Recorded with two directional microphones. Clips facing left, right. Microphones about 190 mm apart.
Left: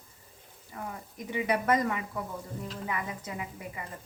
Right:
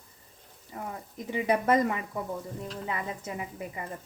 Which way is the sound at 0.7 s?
25° right (ahead or behind).